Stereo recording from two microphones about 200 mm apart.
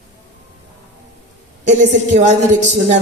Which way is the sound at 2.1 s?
35° right (ahead or behind).